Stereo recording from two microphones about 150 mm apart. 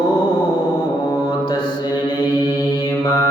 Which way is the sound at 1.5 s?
30° left (ahead or behind).